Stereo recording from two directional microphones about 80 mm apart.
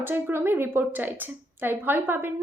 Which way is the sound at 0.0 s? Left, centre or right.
Right.